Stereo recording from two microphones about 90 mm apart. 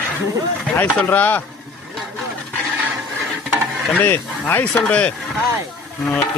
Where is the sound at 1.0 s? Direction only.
20° left (ahead or behind).